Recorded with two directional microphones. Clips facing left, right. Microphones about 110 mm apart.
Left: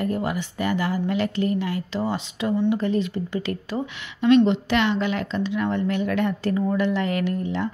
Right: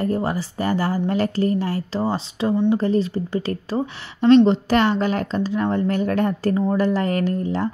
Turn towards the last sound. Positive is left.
turn(degrees=-40)  # may be behind; listen again after turning